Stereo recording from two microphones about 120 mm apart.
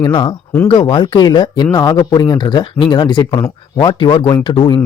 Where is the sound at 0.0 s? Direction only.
40° left (ahead or behind).